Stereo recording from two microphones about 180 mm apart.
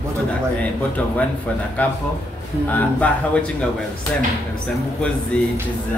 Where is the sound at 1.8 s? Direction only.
10° left (ahead or behind).